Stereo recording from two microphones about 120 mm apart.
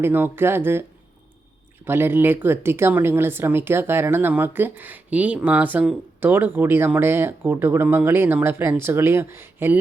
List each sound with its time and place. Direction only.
0.0 s speech: 20° right (ahead or behind)